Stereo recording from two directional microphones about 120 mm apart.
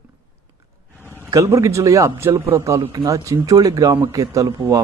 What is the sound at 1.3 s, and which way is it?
Speech, 25° right (ahead or behind).